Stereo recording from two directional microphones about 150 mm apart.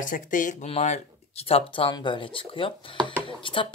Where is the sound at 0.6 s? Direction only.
50° left (ahead or behind).